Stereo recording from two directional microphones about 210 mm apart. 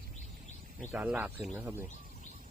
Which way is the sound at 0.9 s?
5° right (ahead or behind).